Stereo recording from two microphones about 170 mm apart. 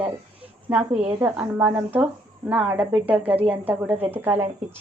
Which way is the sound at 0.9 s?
40° right (ahead or behind).